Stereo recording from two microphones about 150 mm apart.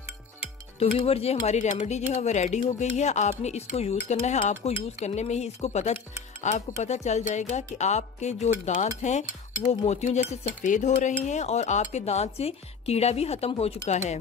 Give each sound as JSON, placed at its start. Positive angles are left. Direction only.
{"t": 0.7, "sound": "speech", "side_deg": 40}